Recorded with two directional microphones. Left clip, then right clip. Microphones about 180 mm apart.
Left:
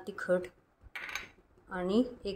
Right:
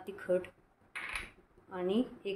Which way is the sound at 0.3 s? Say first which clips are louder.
Left 2 dB; 35° left (ahead or behind).